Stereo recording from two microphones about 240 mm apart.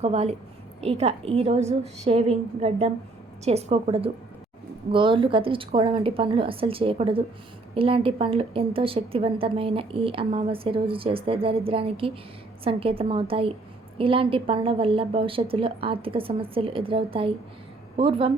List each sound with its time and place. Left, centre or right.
0.0 s a woman's voice: right